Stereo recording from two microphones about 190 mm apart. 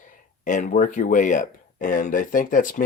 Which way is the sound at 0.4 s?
40° left (ahead or behind).